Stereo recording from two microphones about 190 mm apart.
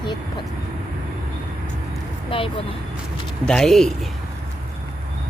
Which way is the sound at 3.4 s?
5° left (ahead or behind).